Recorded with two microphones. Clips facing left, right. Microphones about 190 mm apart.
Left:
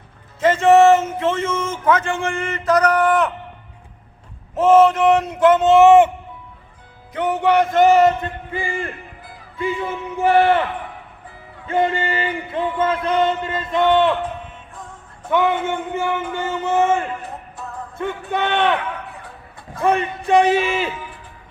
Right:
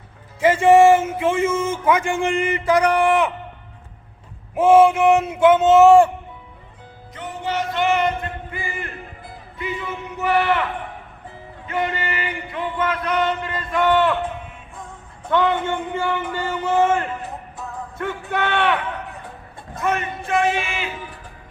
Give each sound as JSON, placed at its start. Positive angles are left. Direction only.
{"t": 0.3, "sound": "speech", "side_deg": -10}
{"t": 4.5, "sound": "speech", "side_deg": -10}
{"t": 7.1, "sound": "music", "side_deg": 65}
{"t": 8.5, "sound": "speech", "side_deg": 30}
{"t": 9.6, "sound": "a sound", "side_deg": 30}
{"t": 11.7, "sound": "a sound", "side_deg": 30}
{"t": 15.3, "sound": "speech", "side_deg": 10}
{"t": 19.8, "sound": "speech", "side_deg": 30}